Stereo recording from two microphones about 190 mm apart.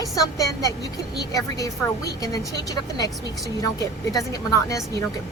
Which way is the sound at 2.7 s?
20° left (ahead or behind).